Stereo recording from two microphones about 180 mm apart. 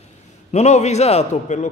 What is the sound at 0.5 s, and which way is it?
A man's voice, 40° left (ahead or behind).